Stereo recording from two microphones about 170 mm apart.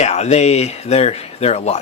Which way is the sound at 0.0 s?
40° left (ahead or behind).